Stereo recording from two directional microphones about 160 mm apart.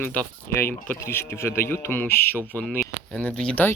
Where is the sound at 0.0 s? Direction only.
10° left (ahead or behind).